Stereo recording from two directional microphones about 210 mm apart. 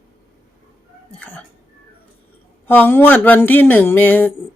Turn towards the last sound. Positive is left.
turn(degrees=10)  # may be behind; listen again after turning